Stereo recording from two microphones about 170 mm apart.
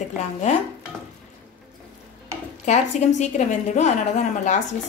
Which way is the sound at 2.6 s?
45° left (ahead or behind).